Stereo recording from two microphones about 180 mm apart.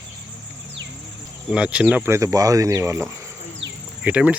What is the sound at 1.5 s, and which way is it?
Speech, 5° right (ahead or behind).